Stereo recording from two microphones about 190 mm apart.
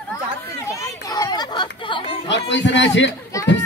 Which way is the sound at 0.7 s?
15° left (ahead or behind).